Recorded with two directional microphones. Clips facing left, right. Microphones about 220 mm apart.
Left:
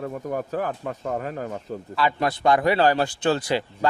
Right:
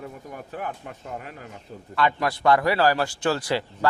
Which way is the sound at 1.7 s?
90° left.